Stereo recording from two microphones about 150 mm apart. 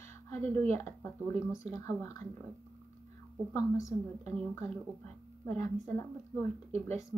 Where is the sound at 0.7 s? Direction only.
15° left (ahead or behind).